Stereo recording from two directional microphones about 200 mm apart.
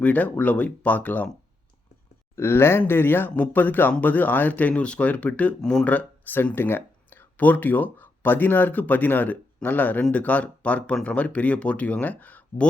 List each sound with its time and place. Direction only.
0.0 s speech: 10° left (ahead or behind)
2.3 s speech: 10° left (ahead or behind)